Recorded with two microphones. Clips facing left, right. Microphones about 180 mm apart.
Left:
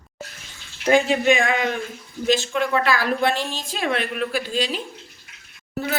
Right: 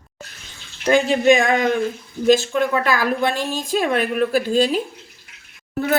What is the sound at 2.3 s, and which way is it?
A woman's voice, 45° right (ahead or behind).